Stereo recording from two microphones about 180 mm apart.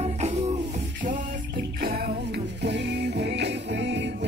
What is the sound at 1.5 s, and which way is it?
Music, 60° right (ahead or behind).